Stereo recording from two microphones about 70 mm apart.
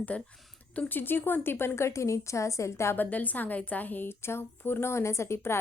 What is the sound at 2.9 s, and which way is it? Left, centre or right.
A woman's voice, left.